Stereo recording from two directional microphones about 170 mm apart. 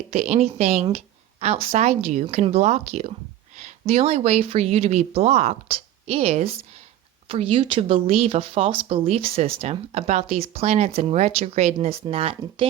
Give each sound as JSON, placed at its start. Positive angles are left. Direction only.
{"t": 0.1, "sound": "speech", "side_deg": -40}